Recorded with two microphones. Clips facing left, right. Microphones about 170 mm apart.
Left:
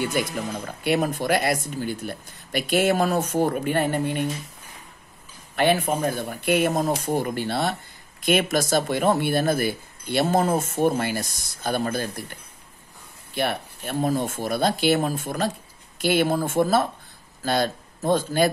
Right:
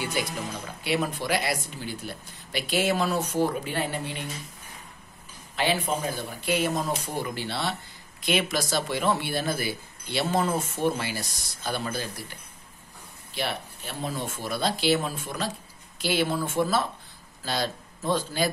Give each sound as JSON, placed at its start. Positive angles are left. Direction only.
{"t": 0.0, "sound": "speech", "side_deg": 50}
{"t": 5.6, "sound": "speech", "side_deg": 55}
{"t": 13.3, "sound": "a man's voice", "side_deg": 55}